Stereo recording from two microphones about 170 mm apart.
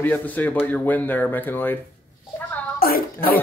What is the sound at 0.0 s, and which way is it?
Speech, 10° left (ahead or behind).